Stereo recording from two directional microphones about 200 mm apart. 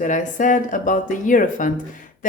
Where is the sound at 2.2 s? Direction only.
40° left (ahead or behind).